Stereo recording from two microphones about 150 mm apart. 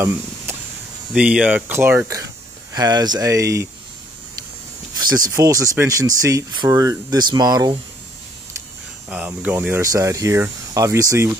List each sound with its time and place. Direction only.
1.1 s speech: 5° right (ahead or behind)
5.3 s speech: 20° right (ahead or behind)
9.1 s speech: 10° right (ahead or behind)